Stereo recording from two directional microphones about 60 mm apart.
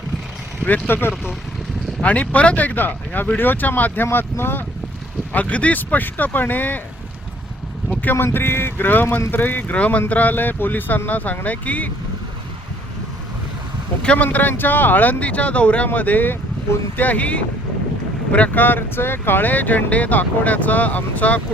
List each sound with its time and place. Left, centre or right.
0.6 s speech: left
2.0 s speech: left
5.3 s speech: left
8.1 s speech: left
14.0 s speech: centre
14.3 s speech: left